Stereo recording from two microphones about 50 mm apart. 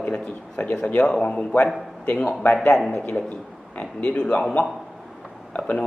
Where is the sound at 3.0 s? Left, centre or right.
Left.